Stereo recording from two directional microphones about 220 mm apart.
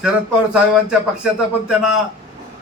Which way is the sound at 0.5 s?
5° right (ahead or behind).